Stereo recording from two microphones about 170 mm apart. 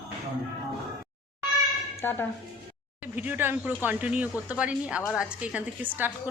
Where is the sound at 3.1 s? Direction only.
10° right (ahead or behind).